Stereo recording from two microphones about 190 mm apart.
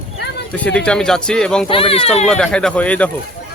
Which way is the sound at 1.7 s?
30° left (ahead or behind).